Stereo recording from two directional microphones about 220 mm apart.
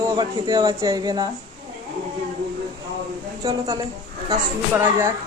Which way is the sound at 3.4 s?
15° right (ahead or behind).